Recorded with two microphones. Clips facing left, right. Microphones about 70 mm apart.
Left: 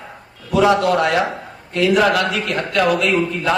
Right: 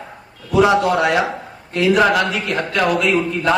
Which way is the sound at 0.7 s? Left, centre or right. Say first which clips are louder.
Even; centre.